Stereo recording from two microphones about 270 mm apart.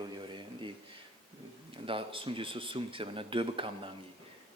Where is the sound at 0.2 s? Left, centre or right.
Centre.